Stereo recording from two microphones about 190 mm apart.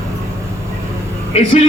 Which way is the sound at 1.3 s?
35° left (ahead or behind).